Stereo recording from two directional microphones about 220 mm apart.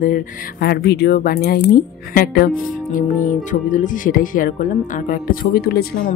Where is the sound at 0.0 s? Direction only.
40° left (ahead or behind).